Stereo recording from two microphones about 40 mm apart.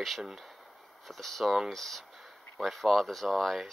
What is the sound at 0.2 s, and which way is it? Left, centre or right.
Speech, centre.